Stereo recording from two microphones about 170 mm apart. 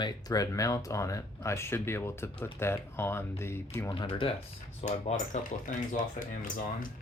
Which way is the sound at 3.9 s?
30° left (ahead or behind).